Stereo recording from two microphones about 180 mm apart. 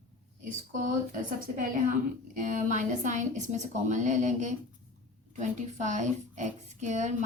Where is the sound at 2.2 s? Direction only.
45° right (ahead or behind).